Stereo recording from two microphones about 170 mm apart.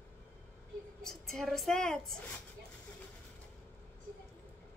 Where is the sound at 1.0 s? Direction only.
Centre (ahead or behind).